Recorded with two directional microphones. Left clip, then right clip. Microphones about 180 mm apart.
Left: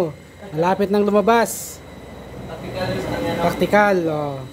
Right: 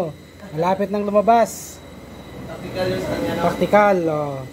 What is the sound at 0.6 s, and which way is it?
Speech, 15° left (ahead or behind).